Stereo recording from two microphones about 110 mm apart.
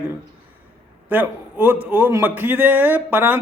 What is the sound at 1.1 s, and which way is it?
A man's voice, 15° right (ahead or behind).